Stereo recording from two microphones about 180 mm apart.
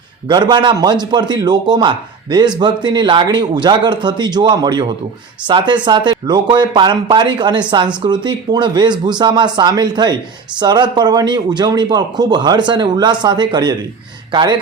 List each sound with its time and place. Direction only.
0.3 s speech: 25° right (ahead or behind)